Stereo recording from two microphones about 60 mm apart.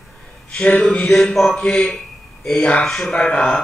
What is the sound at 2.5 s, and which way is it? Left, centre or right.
Mantra, left.